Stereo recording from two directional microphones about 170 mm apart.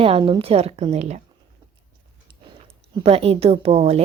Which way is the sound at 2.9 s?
35° right (ahead or behind).